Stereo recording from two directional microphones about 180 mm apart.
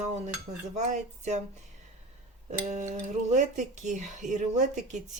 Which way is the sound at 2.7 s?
40° right (ahead or behind).